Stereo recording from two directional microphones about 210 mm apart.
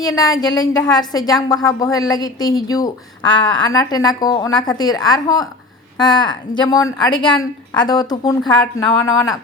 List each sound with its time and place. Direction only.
0.0 s a woman's voice: 15° left (ahead or behind)